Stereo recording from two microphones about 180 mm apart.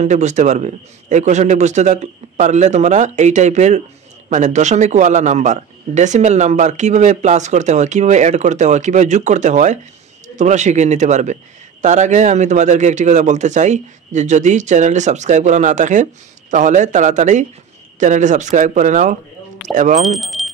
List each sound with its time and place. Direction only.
0.0 s a man's voice: 40° right (ahead or behind)
20.1 s speech: centre (ahead or behind)